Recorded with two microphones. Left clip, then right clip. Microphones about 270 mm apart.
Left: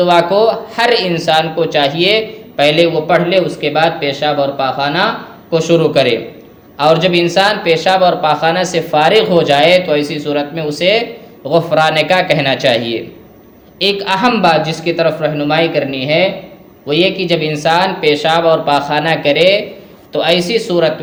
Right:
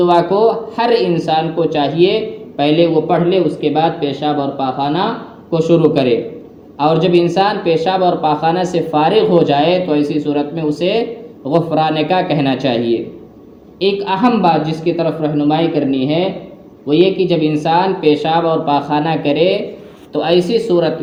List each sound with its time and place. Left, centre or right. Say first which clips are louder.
0.0 s a man's voice: left 2 dB; left